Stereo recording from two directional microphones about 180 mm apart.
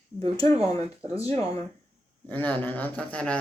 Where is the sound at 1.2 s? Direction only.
30° right (ahead or behind).